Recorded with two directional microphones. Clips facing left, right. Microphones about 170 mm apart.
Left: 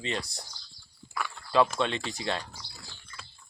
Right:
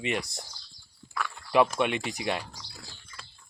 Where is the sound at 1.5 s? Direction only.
15° right (ahead or behind).